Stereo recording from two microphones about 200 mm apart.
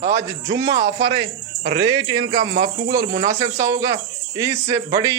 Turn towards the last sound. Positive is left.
turn(degrees=-15)  # may be behind; listen again after turning